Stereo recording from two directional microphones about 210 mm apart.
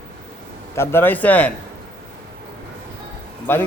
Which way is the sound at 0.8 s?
10° left (ahead or behind).